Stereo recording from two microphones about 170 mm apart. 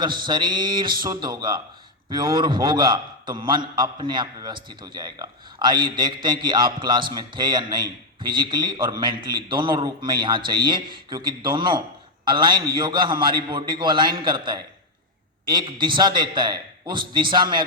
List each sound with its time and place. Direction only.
0.0 s a man's voice: 25° right (ahead or behind)